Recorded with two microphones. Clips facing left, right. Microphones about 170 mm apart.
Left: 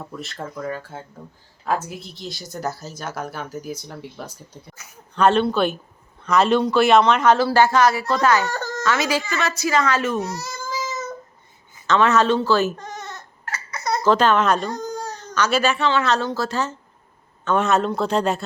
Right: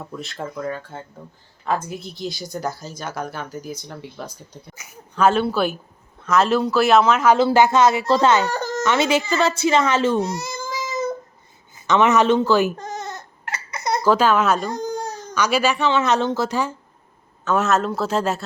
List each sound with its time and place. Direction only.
0.2 s a woman's voice: centre (ahead or behind)
4.7 s a woman's voice: 10° right (ahead or behind)
7.3 s a woman's voice: 20° right (ahead or behind)
12.7 s bleat: 40° right (ahead or behind)
13.4 s hiccup: 20° right (ahead or behind)
15.4 s a woman's voice: 10° right (ahead or behind)